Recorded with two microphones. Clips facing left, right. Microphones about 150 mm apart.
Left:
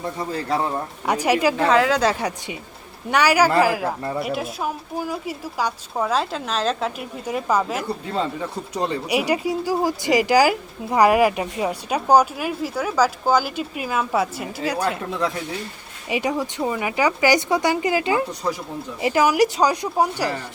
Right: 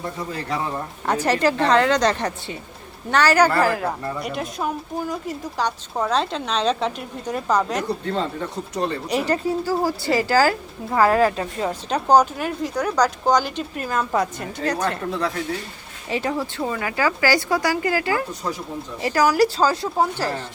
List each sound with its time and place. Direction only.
1.0 s speech: 10° left (ahead or behind)
16.0 s speech: 10° left (ahead or behind)